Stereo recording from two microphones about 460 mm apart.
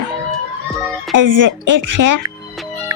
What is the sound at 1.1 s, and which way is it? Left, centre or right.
Speech, right.